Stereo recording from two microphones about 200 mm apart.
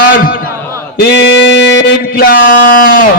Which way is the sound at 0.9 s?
60° left (ahead or behind).